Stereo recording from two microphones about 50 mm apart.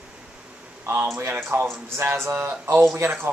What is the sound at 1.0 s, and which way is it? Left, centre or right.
A man's voice, right.